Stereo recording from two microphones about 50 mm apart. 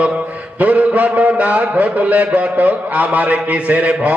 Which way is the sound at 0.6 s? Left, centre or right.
Right.